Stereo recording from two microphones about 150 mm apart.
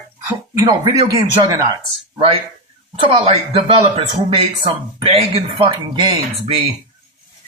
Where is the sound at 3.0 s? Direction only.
35° right (ahead or behind).